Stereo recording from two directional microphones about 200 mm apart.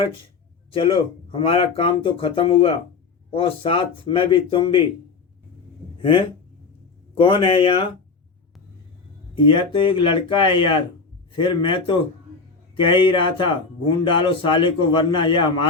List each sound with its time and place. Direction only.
0.7 s speech: 25° left (ahead or behind)
6.0 s speech: 25° left (ahead or behind)
9.3 s speech: 25° left (ahead or behind)